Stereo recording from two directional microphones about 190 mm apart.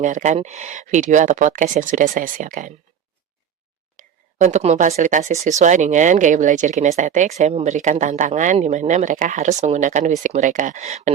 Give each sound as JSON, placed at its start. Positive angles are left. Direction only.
{"t": 0.0, "sound": "speech", "side_deg": -40}
{"t": 3.9, "sound": "speech", "side_deg": -40}